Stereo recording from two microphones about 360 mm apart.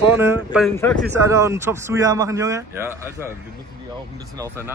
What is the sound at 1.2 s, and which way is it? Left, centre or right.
Speech, centre.